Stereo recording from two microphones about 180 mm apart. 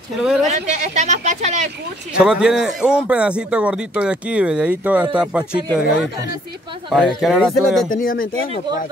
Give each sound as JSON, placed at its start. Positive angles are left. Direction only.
{"t": 0.2, "sound": "a sound", "side_deg": 0}
{"t": 0.5, "sound": "speech", "side_deg": -40}
{"t": 2.1, "sound": "a man's voice", "side_deg": -5}
{"t": 6.9, "sound": "a man's voice", "side_deg": 0}
{"t": 7.9, "sound": "speech", "side_deg": 50}